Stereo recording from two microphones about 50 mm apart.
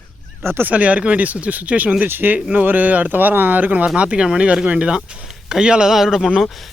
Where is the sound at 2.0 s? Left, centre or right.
Right.